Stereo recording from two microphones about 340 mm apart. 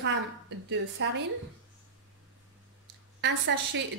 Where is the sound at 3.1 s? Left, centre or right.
Right.